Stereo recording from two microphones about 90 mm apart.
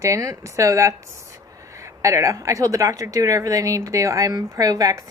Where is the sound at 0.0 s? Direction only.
35° right (ahead or behind).